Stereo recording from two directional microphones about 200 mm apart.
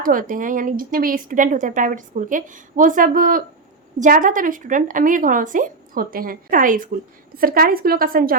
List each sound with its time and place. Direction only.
0.0 s speech: 45° right (ahead or behind)